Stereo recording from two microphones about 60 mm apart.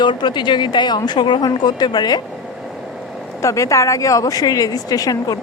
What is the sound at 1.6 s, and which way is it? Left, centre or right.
Speech, left.